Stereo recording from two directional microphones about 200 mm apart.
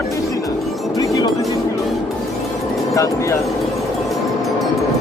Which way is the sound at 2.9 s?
15° left (ahead or behind).